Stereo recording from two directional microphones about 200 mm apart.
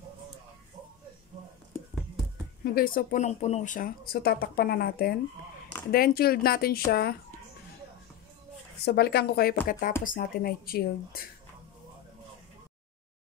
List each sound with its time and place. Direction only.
2.6 s speech: 45° left (ahead or behind)
8.8 s speech: 55° left (ahead or behind)